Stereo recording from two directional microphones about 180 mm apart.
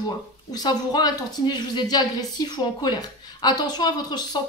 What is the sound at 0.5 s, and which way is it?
Speech, 20° left (ahead or behind).